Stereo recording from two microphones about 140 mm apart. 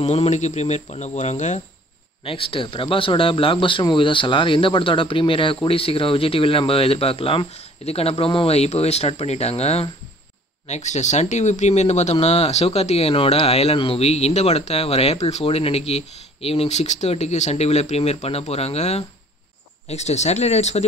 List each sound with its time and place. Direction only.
0.0 s speech: 50° left (ahead or behind)
2.2 s speech: 40° left (ahead or behind)
10.7 s speech: 60° left (ahead or behind)